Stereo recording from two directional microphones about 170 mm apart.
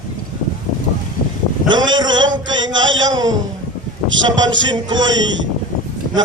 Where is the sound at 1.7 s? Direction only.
25° right (ahead or behind).